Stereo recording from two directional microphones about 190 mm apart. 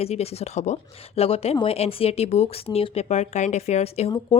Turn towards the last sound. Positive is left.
turn(degrees=30)  # may be behind; listen again after turning